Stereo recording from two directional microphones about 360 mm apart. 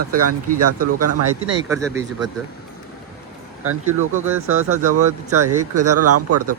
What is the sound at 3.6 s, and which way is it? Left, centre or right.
Speech, right.